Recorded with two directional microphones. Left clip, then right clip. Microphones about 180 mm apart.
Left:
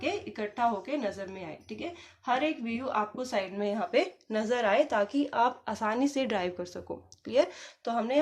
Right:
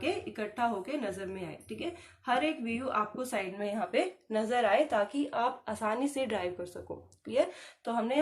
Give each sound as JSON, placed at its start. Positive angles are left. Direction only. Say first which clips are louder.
{"t": 0.0, "sound": "speech", "louder": "left 1 dB", "side_deg": 25}